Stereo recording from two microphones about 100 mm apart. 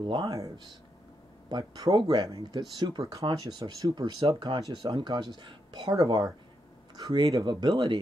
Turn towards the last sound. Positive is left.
turn(degrees=-45)  # may be behind; listen again after turning